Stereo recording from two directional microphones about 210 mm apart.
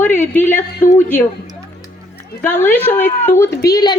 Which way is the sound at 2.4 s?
10° left (ahead or behind).